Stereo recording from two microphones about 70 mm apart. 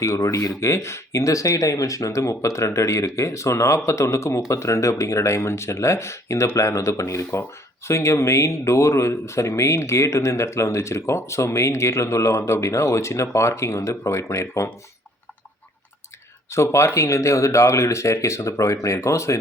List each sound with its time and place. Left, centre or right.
0.0 s speech: left
16.5 s speech: left